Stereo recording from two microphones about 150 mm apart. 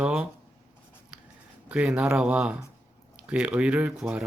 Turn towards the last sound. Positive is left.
turn(degrees=-5)  # may be behind; listen again after turning